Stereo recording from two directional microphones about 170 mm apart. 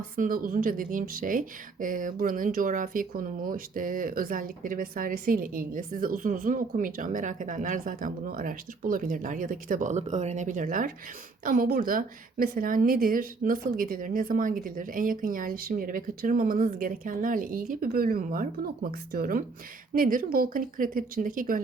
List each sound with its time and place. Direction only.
0.2 s a woman's voice: 55° right (ahead or behind)